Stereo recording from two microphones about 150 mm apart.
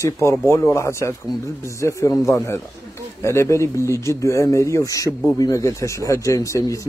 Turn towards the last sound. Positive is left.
turn(degrees=20)  # may be behind; listen again after turning